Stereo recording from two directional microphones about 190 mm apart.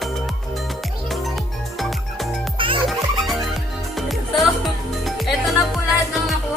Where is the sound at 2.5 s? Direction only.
25° right (ahead or behind).